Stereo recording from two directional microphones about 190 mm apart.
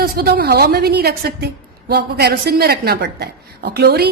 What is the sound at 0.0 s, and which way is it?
A woman's voice, 55° right (ahead or behind).